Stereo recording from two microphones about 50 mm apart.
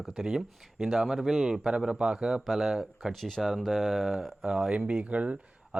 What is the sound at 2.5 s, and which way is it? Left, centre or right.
A man's voice, centre.